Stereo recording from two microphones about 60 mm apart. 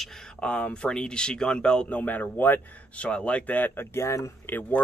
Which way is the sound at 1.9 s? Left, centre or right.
Left.